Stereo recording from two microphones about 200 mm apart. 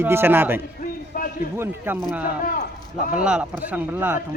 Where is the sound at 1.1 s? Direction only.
40° left (ahead or behind).